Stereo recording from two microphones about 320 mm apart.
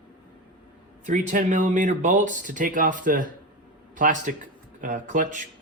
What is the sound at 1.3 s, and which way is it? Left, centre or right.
Speech, right.